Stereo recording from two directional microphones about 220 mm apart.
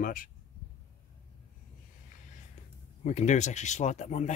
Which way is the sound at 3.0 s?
30° left (ahead or behind).